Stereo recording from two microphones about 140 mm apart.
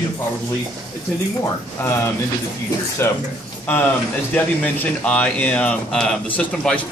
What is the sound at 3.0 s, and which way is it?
A man's voice, 15° left (ahead or behind).